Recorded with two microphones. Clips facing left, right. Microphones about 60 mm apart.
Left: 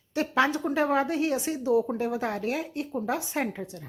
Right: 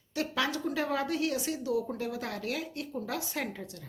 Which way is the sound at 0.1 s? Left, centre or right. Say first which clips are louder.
Left 7 dB; left.